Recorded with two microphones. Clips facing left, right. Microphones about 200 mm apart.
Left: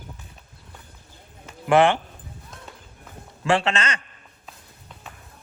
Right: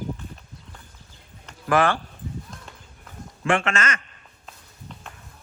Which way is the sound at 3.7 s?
30° left (ahead or behind).